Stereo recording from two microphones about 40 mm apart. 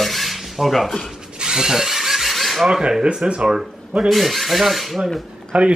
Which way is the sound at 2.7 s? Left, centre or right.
Right.